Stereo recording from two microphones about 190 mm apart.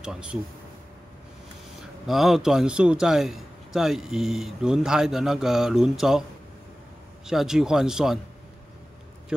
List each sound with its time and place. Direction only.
0.0 s a man's voice: 5° right (ahead or behind)
2.0 s a man's voice: centre (ahead or behind)
7.2 s a man's voice: centre (ahead or behind)